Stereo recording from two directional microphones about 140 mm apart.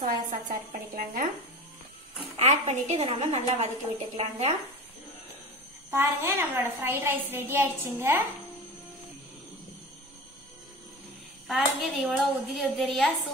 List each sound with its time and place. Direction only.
0.0 s a woman's voice: 80° right
2.3 s a woman's voice: 50° right (ahead or behind)
5.9 s a woman's voice: 15° right (ahead or behind)
11.4 s speech: centre (ahead or behind)